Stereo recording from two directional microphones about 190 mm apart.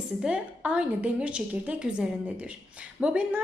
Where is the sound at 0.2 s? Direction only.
5° right (ahead or behind).